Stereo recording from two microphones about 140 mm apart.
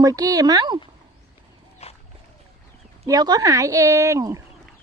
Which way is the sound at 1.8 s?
45° left (ahead or behind).